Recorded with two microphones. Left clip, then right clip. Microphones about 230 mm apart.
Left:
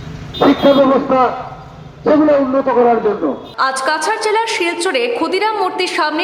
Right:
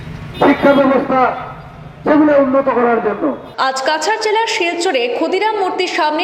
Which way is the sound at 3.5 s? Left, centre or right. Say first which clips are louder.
Even; centre.